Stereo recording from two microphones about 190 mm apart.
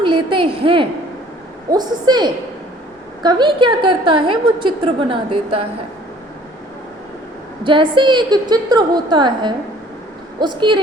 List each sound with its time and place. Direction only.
0.0 s a sound: 25° right (ahead or behind)
1.7 s a woman's voice: 20° right (ahead or behind)
7.6 s a woman's voice: 25° right (ahead or behind)